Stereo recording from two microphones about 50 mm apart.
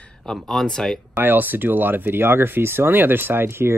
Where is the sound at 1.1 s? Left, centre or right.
Right.